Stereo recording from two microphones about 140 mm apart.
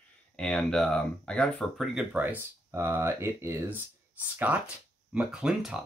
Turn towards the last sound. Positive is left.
turn(degrees=-5)  # may be behind; listen again after turning